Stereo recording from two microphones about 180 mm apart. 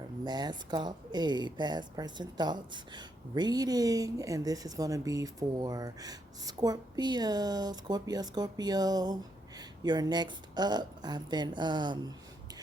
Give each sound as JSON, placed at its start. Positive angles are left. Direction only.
{"t": 0.3, "sound": "speech", "side_deg": -25}